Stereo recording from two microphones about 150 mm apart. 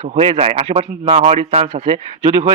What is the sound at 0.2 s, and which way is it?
A man's voice, 40° right (ahead or behind).